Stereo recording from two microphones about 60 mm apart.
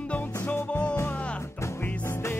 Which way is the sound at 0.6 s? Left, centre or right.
Left.